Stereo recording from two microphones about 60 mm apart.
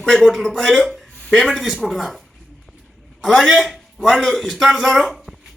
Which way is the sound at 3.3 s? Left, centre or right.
Centre.